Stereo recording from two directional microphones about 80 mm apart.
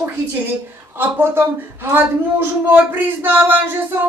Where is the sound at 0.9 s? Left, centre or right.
Right.